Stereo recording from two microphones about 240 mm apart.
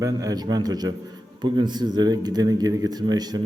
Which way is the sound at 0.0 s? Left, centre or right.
Centre.